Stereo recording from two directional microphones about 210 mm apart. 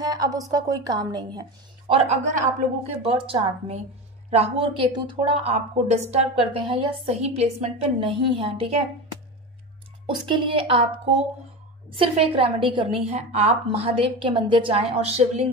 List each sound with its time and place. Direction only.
0.0 s a woman's voice: 20° right (ahead or behind)
1.9 s a woman's voice: 30° right (ahead or behind)
10.0 s a woman's voice: 25° right (ahead or behind)
12.0 s a woman's voice: 25° right (ahead or behind)